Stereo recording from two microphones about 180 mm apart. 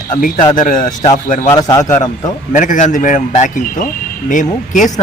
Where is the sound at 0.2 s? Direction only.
50° left (ahead or behind).